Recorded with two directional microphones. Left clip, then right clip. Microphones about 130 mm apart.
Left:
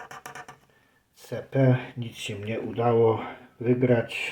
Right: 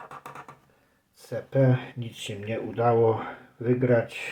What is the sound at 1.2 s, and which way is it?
Speech, 15° left (ahead or behind).